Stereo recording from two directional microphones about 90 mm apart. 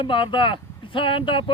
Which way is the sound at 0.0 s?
65° left (ahead or behind).